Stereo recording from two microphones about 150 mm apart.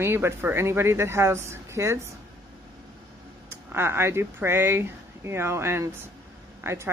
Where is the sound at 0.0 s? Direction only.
15° right (ahead or behind).